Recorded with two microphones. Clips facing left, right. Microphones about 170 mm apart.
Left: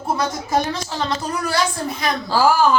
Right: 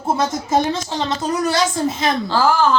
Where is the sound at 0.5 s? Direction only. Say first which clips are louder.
Right 3 dB; 20° right (ahead or behind).